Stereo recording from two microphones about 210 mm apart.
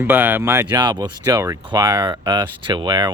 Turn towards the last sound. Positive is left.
turn(degrees=-20)  # may be behind; listen again after turning